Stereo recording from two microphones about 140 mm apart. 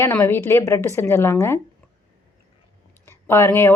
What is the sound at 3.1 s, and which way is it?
Speech, 20° left (ahead or behind).